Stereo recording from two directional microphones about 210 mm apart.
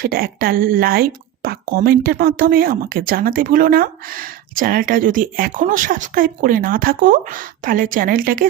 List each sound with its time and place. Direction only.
0.0 s speech: 45° right (ahead or behind)